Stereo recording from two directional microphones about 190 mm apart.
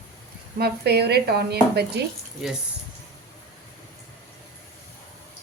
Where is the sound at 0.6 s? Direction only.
60° right (ahead or behind).